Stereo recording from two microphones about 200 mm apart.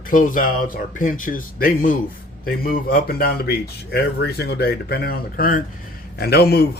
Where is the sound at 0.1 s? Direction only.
40° left (ahead or behind).